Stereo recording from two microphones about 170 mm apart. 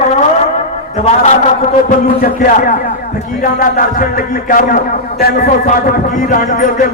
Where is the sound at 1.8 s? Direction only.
50° left (ahead or behind).